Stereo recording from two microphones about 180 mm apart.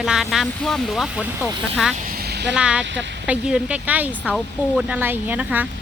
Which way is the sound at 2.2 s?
65° right (ahead or behind).